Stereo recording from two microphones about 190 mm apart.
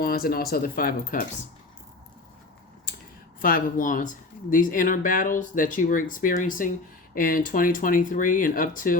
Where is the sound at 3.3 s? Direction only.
45° left (ahead or behind).